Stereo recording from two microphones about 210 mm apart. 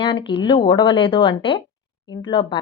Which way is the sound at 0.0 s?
25° left (ahead or behind).